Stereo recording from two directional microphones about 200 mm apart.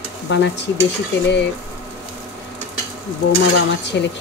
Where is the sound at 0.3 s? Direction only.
60° left (ahead or behind).